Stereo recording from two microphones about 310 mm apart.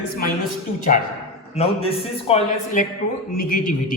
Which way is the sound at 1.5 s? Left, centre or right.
Centre.